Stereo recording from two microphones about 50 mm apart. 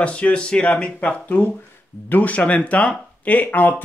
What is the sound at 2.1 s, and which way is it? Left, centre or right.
Speech, left.